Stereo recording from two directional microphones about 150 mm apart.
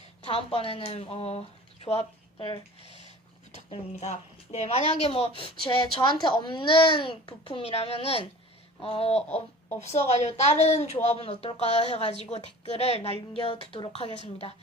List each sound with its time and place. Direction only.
0.2 s speech: 40° left (ahead or behind)
3.7 s speech: 50° left (ahead or behind)